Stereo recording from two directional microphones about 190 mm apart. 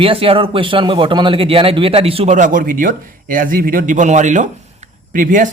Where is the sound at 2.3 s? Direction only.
45° right (ahead or behind).